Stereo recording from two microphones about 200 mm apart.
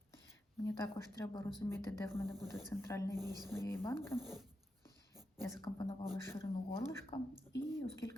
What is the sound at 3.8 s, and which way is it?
Speech, centre (ahead or behind).